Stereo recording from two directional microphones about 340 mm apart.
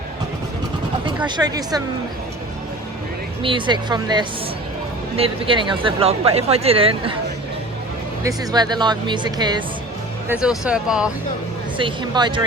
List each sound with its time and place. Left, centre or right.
1.2 s speech: centre
3.4 s speech: centre
8.2 s speech: centre
10.4 s speech: centre
11.8 s speech: centre